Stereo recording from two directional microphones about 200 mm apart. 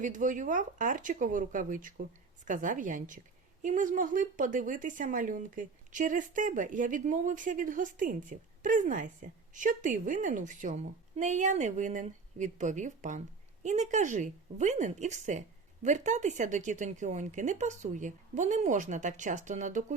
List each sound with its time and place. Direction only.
0.0 s a woman's voice: 40° right (ahead or behind)